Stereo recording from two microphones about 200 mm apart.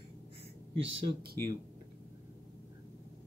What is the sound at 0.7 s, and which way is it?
Speech, 65° right (ahead or behind).